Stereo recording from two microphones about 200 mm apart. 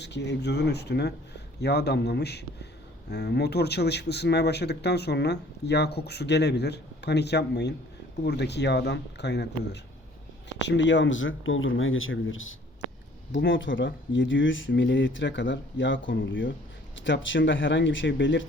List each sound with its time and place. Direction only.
0.0 s speech: 60° left (ahead or behind); by 12.5 s 80° left
13.3 s speech: 65° left (ahead or behind)